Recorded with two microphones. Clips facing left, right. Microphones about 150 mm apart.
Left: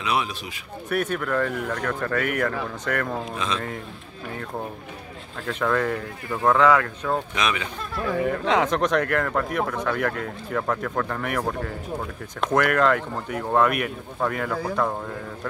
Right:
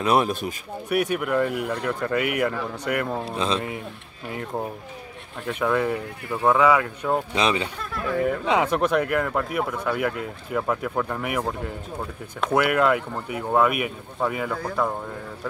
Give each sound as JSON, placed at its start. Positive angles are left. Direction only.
{"t": 0.0, "sound": "speech", "side_deg": -50}
{"t": 0.8, "sound": "speech", "side_deg": -10}
{"t": 3.3, "sound": "speech", "side_deg": -30}
{"t": 5.4, "sound": "speech", "side_deg": -10}
{"t": 7.3, "sound": "speech", "side_deg": -30}
{"t": 8.0, "sound": "speech", "side_deg": 0}